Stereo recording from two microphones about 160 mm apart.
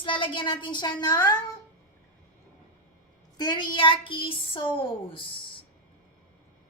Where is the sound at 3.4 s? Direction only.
30° left (ahead or behind).